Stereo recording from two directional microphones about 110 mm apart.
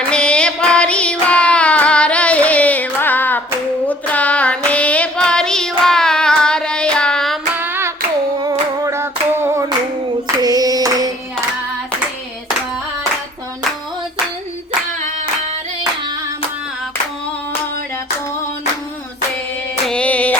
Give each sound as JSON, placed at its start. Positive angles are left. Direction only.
{"t": 0.1, "sound": "child singing", "side_deg": 10}
{"t": 7.6, "sound": "hands", "side_deg": -20}
{"t": 8.8, "sound": "a sound", "side_deg": -25}
{"t": 10.4, "sound": "hands", "side_deg": -35}
{"t": 19.9, "sound": "music", "side_deg": 10}